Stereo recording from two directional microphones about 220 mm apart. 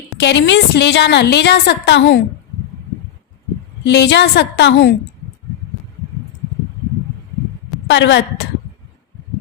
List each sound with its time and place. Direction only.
0.2 s a woman's voice: 50° left (ahead or behind)
3.8 s a woman's voice: 50° left (ahead or behind)
7.9 s a woman's voice: 55° left (ahead or behind)